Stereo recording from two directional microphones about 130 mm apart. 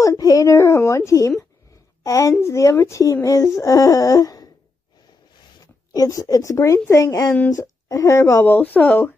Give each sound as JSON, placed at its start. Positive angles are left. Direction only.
{"t": 0.0, "sound": "speech", "side_deg": 25}
{"t": 5.9, "sound": "speech", "side_deg": 25}